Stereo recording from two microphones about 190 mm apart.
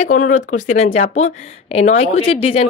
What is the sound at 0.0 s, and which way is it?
A woman's voice, 40° left (ahead or behind).